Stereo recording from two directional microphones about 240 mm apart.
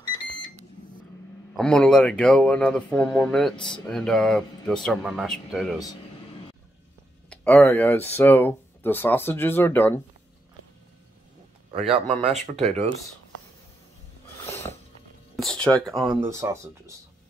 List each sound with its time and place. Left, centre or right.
1.6 s speech: centre
7.2 s speech: centre
11.9 s speech: right
14.4 s a sound: centre
15.3 s speech: centre
16.3 s speech: centre